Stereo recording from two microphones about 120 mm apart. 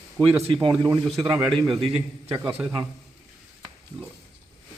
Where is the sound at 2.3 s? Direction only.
30° right (ahead or behind).